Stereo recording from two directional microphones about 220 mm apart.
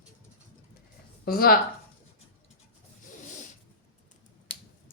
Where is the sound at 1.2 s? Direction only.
45° left (ahead or behind).